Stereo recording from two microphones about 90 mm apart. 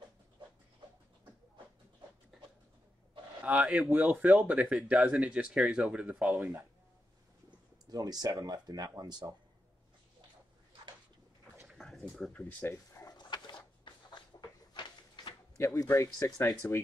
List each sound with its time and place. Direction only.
2.3 s a sound: 5° right (ahead or behind)
3.4 s speech: 15° right (ahead or behind)
7.8 s speech: 45° right (ahead or behind)
12.0 s speech: 15° left (ahead or behind)
13.0 s a sound: 50° left (ahead or behind)
15.5 s speech: 40° left (ahead or behind)
16.6 s speech: 25° left (ahead or behind)